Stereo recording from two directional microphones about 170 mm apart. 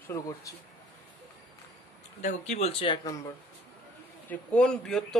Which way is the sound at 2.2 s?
45° left (ahead or behind).